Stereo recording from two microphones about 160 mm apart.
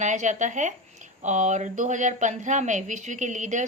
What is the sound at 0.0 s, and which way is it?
Speech, 50° right (ahead or behind).